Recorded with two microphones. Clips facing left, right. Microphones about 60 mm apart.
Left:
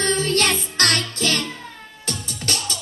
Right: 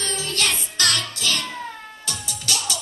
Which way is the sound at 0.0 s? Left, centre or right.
Left.